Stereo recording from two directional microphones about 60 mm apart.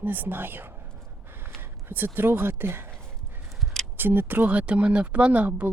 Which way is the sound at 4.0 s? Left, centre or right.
Right.